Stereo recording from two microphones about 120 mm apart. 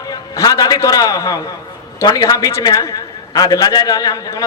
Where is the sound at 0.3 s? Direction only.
30° left (ahead or behind).